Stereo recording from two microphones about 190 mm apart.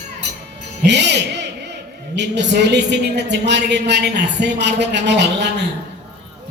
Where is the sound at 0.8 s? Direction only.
65° right (ahead or behind).